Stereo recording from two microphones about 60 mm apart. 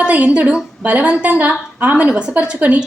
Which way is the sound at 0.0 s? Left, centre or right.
Right.